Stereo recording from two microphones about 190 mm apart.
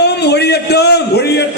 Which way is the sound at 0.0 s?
60° left (ahead or behind).